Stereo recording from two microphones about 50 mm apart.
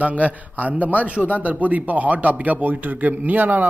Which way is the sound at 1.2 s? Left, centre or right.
Left.